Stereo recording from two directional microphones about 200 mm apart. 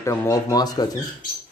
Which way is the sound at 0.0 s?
15° left (ahead or behind).